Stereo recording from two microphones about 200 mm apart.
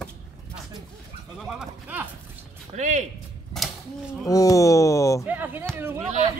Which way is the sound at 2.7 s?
35° right (ahead or behind).